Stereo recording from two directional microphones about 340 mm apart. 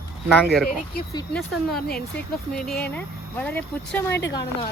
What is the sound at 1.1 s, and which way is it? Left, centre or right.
Speech, centre.